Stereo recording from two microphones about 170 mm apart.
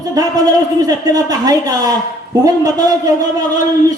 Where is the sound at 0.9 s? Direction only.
20° right (ahead or behind).